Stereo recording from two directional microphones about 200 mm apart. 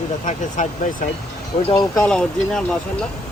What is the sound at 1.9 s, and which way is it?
Speech, 5° left (ahead or behind).